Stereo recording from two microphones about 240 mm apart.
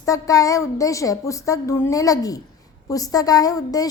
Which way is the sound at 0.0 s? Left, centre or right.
Centre.